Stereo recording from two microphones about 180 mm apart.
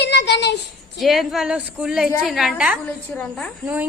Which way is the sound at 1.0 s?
Centre (ahead or behind).